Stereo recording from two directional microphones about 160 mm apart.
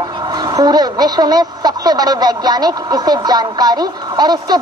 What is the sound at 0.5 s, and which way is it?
A woman's voice, 25° right (ahead or behind).